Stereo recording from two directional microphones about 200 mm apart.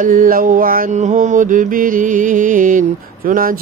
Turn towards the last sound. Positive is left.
turn(degrees=-45)  # may be behind; listen again after turning